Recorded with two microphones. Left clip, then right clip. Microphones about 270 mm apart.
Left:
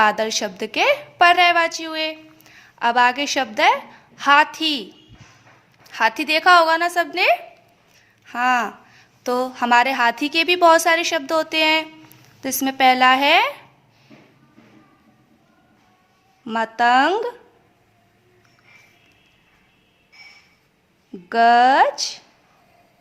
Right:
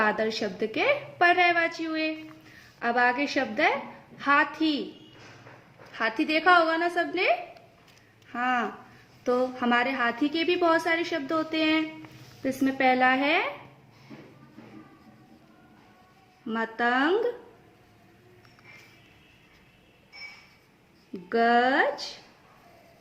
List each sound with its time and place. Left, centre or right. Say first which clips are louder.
0.0 s a woman's voice: left 8 dB; left
5.9 s a woman's voice: left 8 dB; left
16.5 s a woman's voice: left 10 dB; left
21.2 s a woman's voice: left 9 dB; left